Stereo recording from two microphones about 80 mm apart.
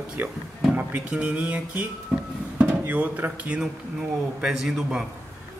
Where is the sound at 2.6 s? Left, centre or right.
Centre.